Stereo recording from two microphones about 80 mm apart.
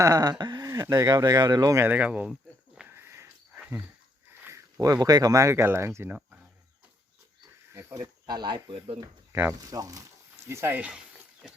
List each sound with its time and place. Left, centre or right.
0.0 s speech: right
0.6 s speech: right
1.9 s speech: centre
2.2 s a sound: centre
2.8 s wheeze: right
4.8 s speech: right
7.7 s wild animals: right
8.0 s speech: right
9.6 s speech: right
10.5 s speech: right
10.8 s speech: centre